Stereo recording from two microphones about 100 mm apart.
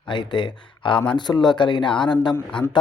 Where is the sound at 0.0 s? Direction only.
50° left (ahead or behind).